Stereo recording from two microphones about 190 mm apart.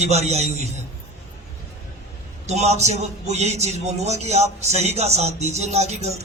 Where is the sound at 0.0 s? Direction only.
35° right (ahead or behind).